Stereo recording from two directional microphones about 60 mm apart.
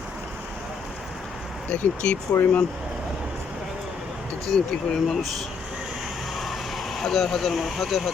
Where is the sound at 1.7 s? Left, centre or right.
Centre.